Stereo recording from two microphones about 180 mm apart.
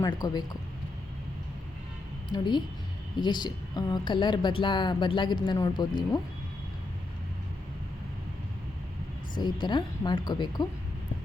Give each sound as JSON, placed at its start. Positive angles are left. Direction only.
{"t": 0.0, "sound": "a woman's voice", "side_deg": 20}
{"t": 2.3, "sound": "a woman's voice", "side_deg": 25}
{"t": 9.4, "sound": "a woman's voice", "side_deg": 25}